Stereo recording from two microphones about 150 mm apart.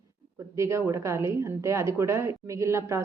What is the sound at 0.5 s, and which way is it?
A woman's voice, 20° right (ahead or behind).